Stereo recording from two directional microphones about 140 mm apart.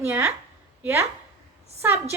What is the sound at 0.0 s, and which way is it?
A woman's voice, 15° right (ahead or behind).